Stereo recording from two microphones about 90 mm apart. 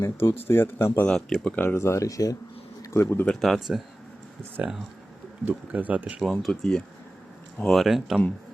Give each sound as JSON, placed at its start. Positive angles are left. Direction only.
{"t": 0.0, "sound": "speech", "side_deg": 30}
{"t": 1.0, "sound": "speech", "side_deg": 10}
{"t": 1.6, "sound": "speech", "side_deg": 30}
{"t": 3.4, "sound": "speech", "side_deg": 0}
{"t": 4.6, "sound": "speech", "side_deg": -15}
{"t": 6.1, "sound": "speech", "side_deg": 0}